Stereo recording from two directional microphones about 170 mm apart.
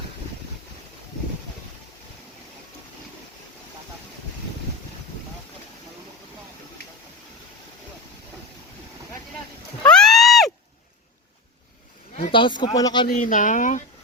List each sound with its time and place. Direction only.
9.8 s a sound: 5° left (ahead or behind)
12.1 s speech: 30° left (ahead or behind)
13.1 s speech: 50° left (ahead or behind)